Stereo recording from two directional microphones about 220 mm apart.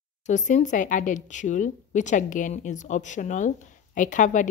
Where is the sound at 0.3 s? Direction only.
35° left (ahead or behind).